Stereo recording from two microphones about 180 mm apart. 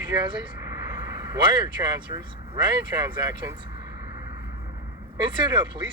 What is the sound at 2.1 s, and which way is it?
Speech, 20° right (ahead or behind).